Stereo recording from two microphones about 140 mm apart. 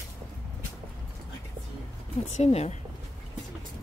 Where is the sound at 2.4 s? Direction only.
50° left (ahead or behind).